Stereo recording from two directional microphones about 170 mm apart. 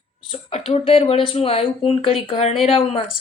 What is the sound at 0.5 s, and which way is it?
A woman's voice, 35° left (ahead or behind).